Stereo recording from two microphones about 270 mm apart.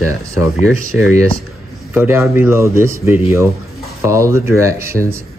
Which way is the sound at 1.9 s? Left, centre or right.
Centre.